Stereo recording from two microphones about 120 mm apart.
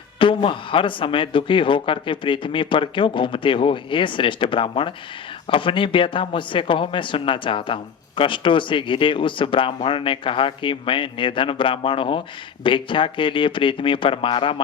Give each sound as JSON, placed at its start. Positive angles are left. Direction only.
{"t": 0.2, "sound": "speech", "side_deg": 45}